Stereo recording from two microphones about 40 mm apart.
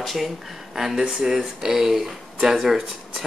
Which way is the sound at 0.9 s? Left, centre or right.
Centre.